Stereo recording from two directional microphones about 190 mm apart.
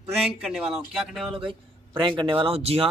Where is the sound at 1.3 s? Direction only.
25° right (ahead or behind).